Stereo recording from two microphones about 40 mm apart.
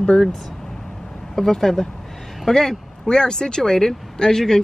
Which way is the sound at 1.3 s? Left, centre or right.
Centre.